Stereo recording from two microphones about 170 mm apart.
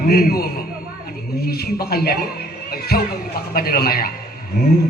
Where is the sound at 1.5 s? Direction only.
65° left (ahead or behind).